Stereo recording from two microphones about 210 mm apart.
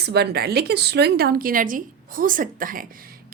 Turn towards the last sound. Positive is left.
turn(degrees=-40)  # may be behind; listen again after turning